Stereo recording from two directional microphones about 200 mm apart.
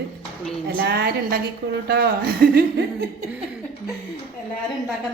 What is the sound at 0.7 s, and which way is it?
A woman's voice, 50° right (ahead or behind).